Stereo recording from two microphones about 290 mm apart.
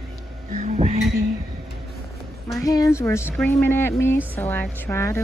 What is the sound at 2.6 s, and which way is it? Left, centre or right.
Speech, centre.